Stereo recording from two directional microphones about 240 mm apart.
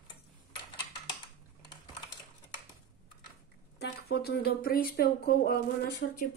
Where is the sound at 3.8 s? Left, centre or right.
Left.